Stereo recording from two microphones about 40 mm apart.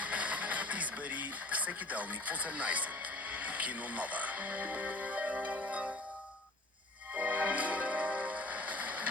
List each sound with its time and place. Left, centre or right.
0.0 s music: right
7.1 s music: right